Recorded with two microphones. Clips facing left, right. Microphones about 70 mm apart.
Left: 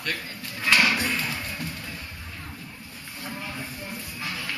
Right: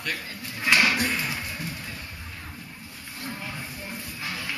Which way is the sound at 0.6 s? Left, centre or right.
Centre.